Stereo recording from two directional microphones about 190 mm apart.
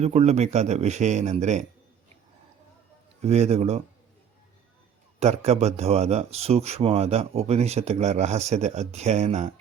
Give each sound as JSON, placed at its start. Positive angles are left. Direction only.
{"t": 0.0, "sound": "speech", "side_deg": -35}
{"t": 3.2, "sound": "speech", "side_deg": -35}
{"t": 5.2, "sound": "speech", "side_deg": -35}